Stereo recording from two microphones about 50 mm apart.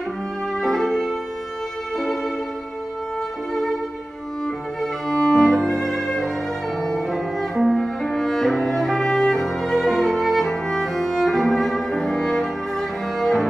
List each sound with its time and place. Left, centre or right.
0.6 s violin: centre
5.3 s music: centre